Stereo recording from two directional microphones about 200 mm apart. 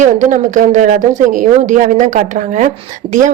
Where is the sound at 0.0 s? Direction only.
40° right (ahead or behind).